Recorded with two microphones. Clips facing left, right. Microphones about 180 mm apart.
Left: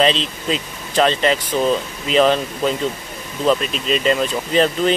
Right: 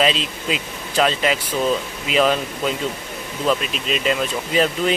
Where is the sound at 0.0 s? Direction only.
5° right (ahead or behind).